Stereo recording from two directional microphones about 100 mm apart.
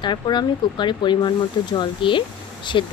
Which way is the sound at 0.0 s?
50° left (ahead or behind).